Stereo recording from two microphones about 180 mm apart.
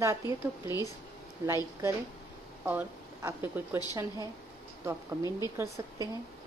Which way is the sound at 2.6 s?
10° right (ahead or behind).